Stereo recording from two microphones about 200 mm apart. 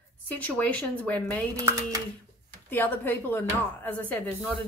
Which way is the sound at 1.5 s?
15° right (ahead or behind).